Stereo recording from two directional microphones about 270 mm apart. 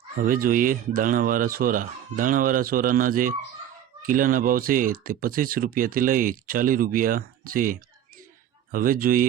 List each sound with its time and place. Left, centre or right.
0.2 s speech: right